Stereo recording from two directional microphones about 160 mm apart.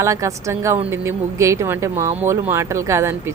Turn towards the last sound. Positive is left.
turn(degrees=-15)  # may be behind; listen again after turning